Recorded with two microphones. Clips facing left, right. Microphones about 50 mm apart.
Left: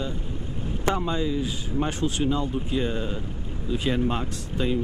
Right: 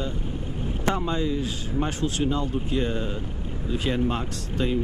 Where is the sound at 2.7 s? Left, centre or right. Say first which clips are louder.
Even; centre.